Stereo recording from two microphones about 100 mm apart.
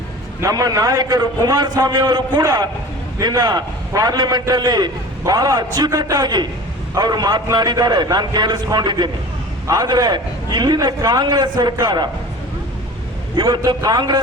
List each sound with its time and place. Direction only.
0.4 s a man's voice: 35° right (ahead or behind)
13.3 s a man's voice: 45° right (ahead or behind)